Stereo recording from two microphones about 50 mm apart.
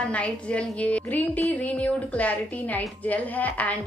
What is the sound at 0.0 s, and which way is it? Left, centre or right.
A woman's voice, left.